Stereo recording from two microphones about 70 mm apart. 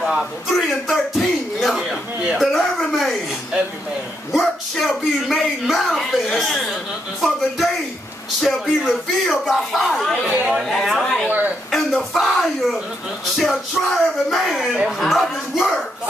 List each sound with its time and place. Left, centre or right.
0.0 s speech: centre
4.3 s speech: centre
10.2 s speech: centre
10.7 s chatter: centre
11.7 s a sound: centre
13.4 s music: centre
14.9 s speech: centre